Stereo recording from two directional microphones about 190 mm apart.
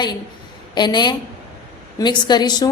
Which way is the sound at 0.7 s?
25° left (ahead or behind).